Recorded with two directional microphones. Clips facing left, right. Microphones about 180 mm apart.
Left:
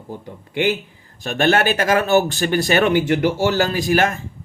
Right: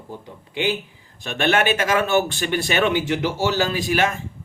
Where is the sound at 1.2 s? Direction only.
40° left (ahead or behind).